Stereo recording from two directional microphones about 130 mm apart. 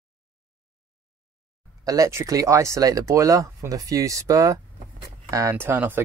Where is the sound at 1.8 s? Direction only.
25° right (ahead or behind).